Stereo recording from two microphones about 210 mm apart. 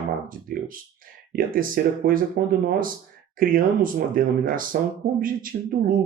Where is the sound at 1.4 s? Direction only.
40° right (ahead or behind).